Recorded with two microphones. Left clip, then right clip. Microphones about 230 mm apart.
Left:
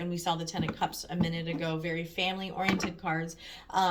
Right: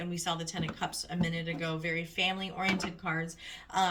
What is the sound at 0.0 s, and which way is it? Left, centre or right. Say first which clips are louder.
Speech: left 3 dB; centre.